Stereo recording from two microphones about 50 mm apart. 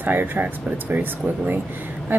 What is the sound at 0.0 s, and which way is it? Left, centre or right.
A woman's voice, right.